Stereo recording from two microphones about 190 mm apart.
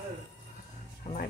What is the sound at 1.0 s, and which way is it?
Music, 35° left (ahead or behind).